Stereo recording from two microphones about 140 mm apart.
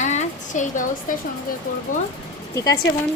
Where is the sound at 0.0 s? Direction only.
55° left (ahead or behind).